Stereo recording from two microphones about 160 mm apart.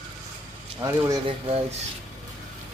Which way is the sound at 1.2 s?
40° right (ahead or behind).